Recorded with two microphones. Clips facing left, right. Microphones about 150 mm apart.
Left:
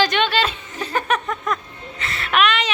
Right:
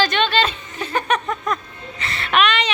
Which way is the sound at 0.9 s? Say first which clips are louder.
Right 1 dB; 5° left (ahead or behind).